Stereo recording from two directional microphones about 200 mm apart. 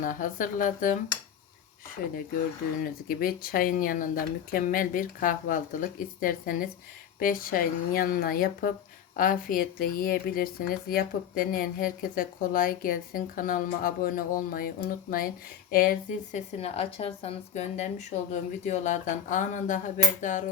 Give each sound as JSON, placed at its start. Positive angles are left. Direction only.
{"t": 0.0, "sound": "speech", "side_deg": 40}
{"t": 2.8, "sound": "a woman's voice", "side_deg": 50}